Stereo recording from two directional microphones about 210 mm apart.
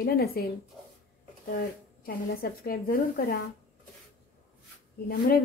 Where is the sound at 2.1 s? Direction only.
45° left (ahead or behind).